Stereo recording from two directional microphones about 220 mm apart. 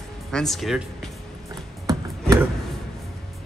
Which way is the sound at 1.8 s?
15° right (ahead or behind).